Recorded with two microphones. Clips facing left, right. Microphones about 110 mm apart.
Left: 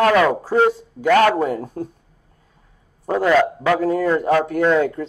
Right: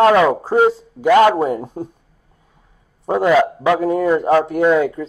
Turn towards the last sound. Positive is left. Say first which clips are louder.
# right 2 dB
turn(degrees=-10)  # may be behind; listen again after turning